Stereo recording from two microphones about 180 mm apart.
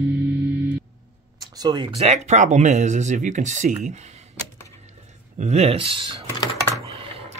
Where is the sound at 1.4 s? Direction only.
20° right (ahead or behind).